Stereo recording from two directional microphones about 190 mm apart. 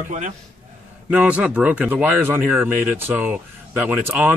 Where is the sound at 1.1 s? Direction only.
5° right (ahead or behind).